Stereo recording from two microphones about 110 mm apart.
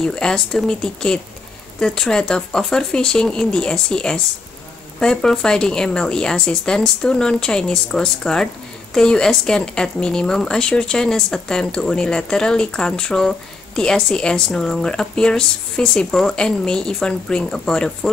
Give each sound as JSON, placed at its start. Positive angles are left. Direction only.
{"t": 0.0, "sound": "a woman's voice", "side_deg": 5}